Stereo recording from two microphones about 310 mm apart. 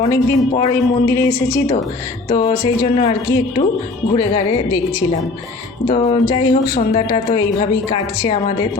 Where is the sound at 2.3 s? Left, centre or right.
Left.